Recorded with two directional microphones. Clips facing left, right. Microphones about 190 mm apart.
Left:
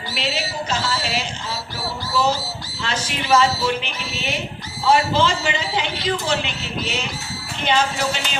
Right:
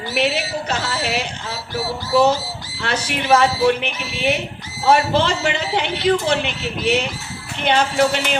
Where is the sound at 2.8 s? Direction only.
60° right (ahead or behind).